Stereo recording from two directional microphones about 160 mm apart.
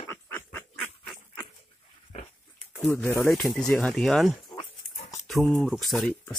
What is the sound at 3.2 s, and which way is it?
Speech, centre (ahead or behind).